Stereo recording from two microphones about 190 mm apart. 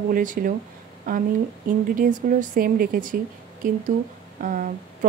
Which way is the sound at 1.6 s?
45° right (ahead or behind).